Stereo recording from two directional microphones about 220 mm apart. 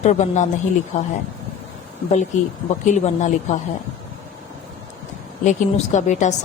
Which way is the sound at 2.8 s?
35° left (ahead or behind).